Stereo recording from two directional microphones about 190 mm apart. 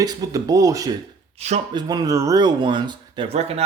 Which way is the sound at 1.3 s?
35° right (ahead or behind).